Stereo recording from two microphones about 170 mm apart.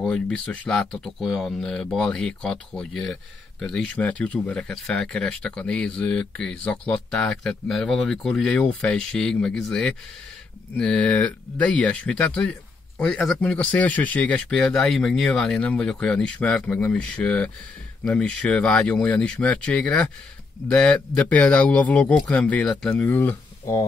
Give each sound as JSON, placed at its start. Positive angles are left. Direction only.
{"t": 0.0, "sound": "a man's voice", "side_deg": 5}